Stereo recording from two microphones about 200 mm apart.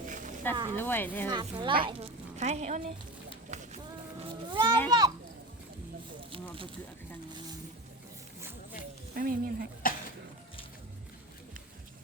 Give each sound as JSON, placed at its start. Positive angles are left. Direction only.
{"t": 0.1, "sound": "a sound", "side_deg": -40}
{"t": 0.5, "sound": "a woman's voice", "side_deg": -20}
{"t": 0.8, "sound": "a woman's voice", "side_deg": 10}
{"t": 1.3, "sound": "a woman's voice", "side_deg": -25}
{"t": 3.5, "sound": "boat", "side_deg": -35}
{"t": 4.2, "sound": "cat", "side_deg": -25}
{"t": 4.9, "sound": "a woman's voice", "side_deg": -20}
{"t": 9.1, "sound": "speech", "side_deg": -45}
{"t": 9.8, "sound": "a sound", "side_deg": 45}